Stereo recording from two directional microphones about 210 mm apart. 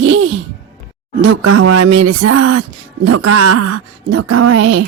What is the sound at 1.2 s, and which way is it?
Speech, 75° right (ahead or behind).